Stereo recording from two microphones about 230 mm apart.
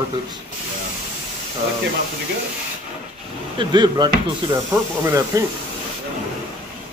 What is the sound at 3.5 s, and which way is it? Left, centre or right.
Speech, centre.